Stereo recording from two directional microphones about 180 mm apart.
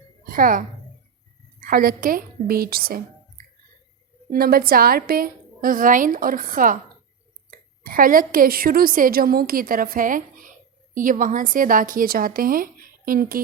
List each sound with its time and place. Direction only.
0.3 s speech: 50° right (ahead or behind)
1.6 s a woman's voice: 55° right (ahead or behind)
7.9 s a woman's voice: 50° right (ahead or behind)